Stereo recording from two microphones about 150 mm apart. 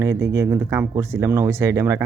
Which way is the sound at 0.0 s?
20° right (ahead or behind).